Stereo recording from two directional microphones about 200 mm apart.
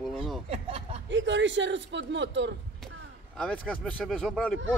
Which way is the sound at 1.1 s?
65° right (ahead or behind).